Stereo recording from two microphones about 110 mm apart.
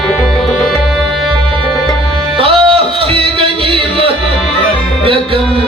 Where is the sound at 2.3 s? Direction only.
55° right (ahead or behind).